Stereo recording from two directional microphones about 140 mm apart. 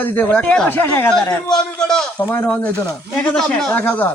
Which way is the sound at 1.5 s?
5° left (ahead or behind).